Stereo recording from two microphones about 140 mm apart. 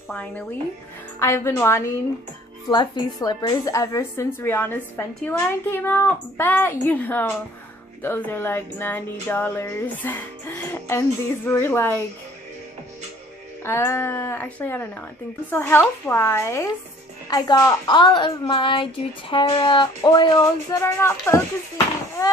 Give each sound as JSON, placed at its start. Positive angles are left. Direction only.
{"t": 1.2, "sound": "a woman's voice", "side_deg": 20}
{"t": 2.7, "sound": "a woman's voice", "side_deg": 30}
{"t": 13.7, "sound": "a woman's voice", "side_deg": 20}
{"t": 20.8, "sound": "a woman's voice", "side_deg": 20}